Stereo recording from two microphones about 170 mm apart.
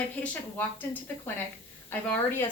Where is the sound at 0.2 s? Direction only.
10° left (ahead or behind).